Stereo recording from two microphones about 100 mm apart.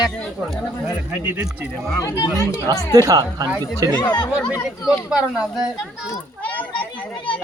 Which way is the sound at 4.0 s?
45° left (ahead or behind).